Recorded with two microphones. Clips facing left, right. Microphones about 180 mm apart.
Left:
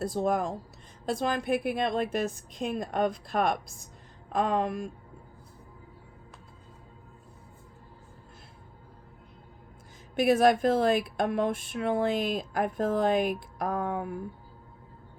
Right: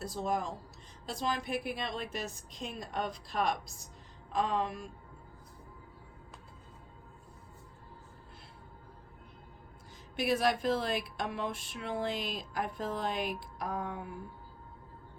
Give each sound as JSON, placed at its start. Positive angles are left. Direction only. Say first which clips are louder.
{"t": 0.0, "sound": "speech", "louder": "left 7 dB", "side_deg": 50}
{"t": 10.2, "sound": "speech", "louder": "left 8 dB", "side_deg": 50}